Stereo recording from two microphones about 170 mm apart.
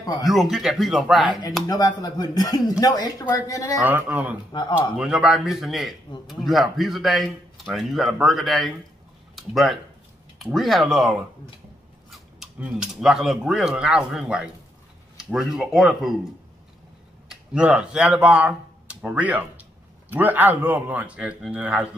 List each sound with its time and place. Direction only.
0.2 s speech: centre (ahead or behind)
1.7 s speech: 20° left (ahead or behind)
3.8 s speech: 10° right (ahead or behind)
4.5 s speech: 25° left (ahead or behind)
4.9 s speech: 5° right (ahead or behind)
17.3 s speech: 5° right (ahead or behind)